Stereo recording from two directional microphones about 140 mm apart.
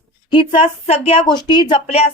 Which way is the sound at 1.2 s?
30° left (ahead or behind).